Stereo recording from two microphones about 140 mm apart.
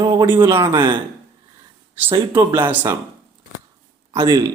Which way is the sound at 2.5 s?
15° right (ahead or behind).